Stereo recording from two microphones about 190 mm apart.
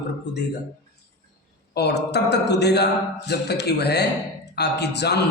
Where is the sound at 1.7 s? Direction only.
60° left (ahead or behind).